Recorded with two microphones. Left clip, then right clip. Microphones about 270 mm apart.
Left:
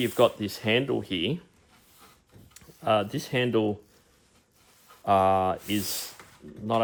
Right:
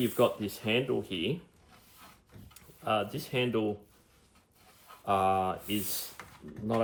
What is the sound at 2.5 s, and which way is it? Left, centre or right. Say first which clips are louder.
Speech: left 6 dB; left.